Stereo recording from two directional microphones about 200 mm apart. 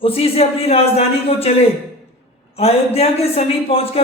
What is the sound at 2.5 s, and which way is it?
A man's voice, 30° left (ahead or behind).